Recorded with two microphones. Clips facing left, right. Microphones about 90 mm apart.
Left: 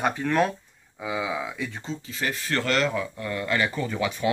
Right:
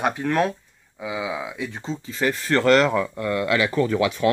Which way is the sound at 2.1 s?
45° right (ahead or behind).